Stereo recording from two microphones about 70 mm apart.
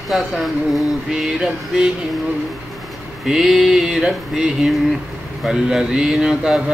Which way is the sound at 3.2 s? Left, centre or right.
Centre.